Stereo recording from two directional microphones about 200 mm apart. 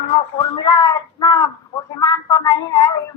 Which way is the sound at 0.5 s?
20° left (ahead or behind).